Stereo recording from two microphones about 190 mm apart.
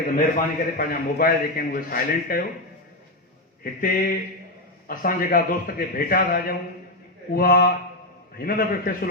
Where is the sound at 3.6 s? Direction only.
50° left (ahead or behind).